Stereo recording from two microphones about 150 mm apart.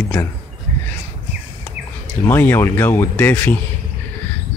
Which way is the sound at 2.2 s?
15° left (ahead or behind).